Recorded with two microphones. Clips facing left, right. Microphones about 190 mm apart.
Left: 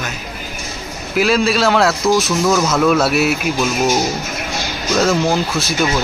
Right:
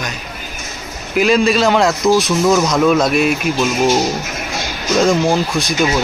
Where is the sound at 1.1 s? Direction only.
5° left (ahead or behind).